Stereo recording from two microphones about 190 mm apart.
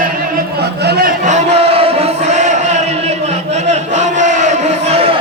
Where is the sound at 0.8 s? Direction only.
55° right (ahead or behind).